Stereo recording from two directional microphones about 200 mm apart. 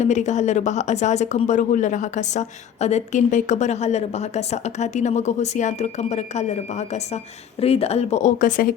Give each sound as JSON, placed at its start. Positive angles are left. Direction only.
{"t": 0.0, "sound": "speech", "side_deg": 35}